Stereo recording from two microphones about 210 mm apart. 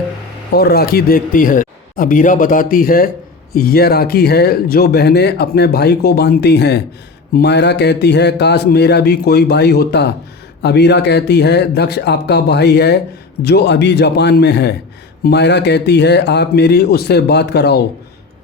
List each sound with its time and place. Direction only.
0.5 s a man's voice: 50° left (ahead or behind)